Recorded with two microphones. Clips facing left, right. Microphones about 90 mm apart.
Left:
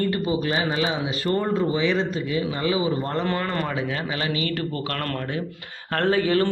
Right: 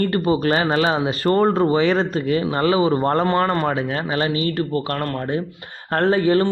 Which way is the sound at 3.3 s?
40° right (ahead or behind).